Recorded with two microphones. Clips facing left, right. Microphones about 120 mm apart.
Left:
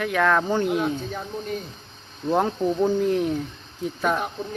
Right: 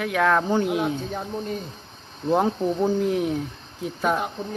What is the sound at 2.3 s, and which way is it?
Speech, 5° right (ahead or behind).